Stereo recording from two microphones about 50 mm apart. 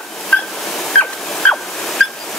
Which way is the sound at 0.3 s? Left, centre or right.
Left.